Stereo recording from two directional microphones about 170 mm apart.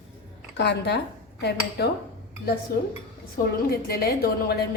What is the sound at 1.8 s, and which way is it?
Speech, 70° left (ahead or behind).